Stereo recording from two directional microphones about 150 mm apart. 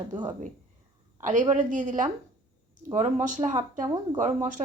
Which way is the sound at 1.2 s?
55° right (ahead or behind).